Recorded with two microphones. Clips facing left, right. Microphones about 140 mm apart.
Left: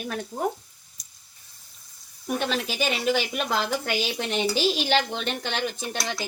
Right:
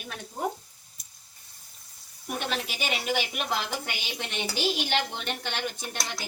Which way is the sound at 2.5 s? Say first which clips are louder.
Left 5 dB; 90° left.